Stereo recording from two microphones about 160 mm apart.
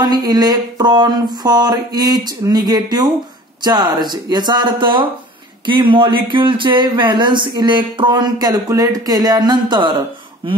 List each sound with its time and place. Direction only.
0.0 s speech: 25° right (ahead or behind)